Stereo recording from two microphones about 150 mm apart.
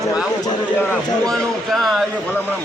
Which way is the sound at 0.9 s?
5° left (ahead or behind).